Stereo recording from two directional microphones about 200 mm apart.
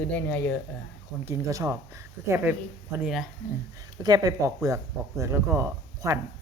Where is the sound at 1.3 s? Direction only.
15° right (ahead or behind).